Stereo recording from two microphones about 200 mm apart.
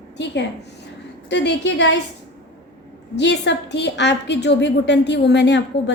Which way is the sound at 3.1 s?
60° left (ahead or behind).